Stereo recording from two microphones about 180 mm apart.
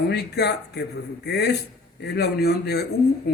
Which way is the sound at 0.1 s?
65° left (ahead or behind).